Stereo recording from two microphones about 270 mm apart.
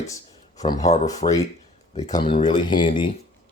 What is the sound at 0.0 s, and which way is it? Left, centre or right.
Speech, centre.